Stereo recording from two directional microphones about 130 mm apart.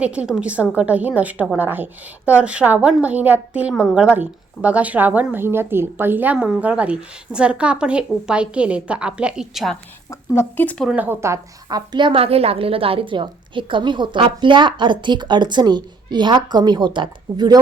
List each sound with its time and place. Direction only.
0.0 s a woman's voice: 10° right (ahead or behind)
10.1 s speech: 15° left (ahead or behind)
10.9 s speech: 15° right (ahead or behind)
11.9 s a woman's voice: 40° right (ahead or behind)